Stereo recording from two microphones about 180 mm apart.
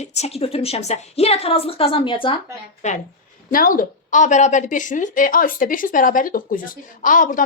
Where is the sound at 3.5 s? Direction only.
50° left (ahead or behind).